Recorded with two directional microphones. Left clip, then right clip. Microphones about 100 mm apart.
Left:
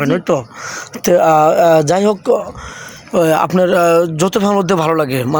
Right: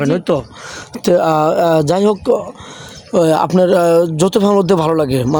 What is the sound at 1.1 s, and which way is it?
Speech, 50° right (ahead or behind).